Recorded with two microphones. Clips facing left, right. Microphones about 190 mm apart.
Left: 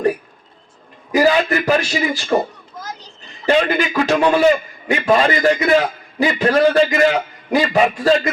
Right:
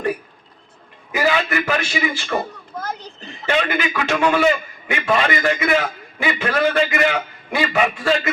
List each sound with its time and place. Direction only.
1.1 s a man's voice: 35° left (ahead or behind)
2.7 s children playing: 55° right (ahead or behind)
3.4 s a man's voice: 35° left (ahead or behind)